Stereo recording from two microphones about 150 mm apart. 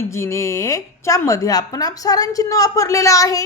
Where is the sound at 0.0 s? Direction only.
20° left (ahead or behind).